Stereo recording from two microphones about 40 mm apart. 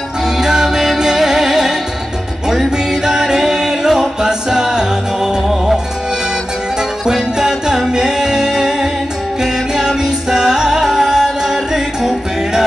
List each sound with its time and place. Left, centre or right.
0.4 s music: centre
2.9 s a capella: centre
7.1 s music: centre